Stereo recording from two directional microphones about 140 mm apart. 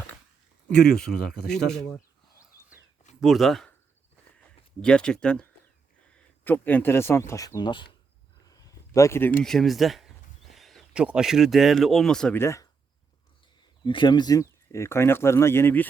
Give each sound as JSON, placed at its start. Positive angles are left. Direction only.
{"t": 0.9, "sound": "speech", "side_deg": 5}
{"t": 3.2, "sound": "speech", "side_deg": 0}
{"t": 8.4, "sound": "a sound", "side_deg": 25}
{"t": 9.4, "sound": "speech", "side_deg": 0}
{"t": 12.4, "sound": "speech", "side_deg": 20}
{"t": 13.8, "sound": "speech", "side_deg": 35}